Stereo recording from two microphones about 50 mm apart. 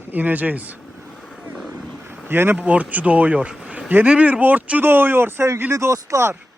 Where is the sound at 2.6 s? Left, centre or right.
Right.